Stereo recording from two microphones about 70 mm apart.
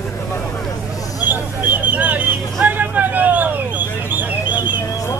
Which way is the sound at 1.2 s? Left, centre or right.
Right.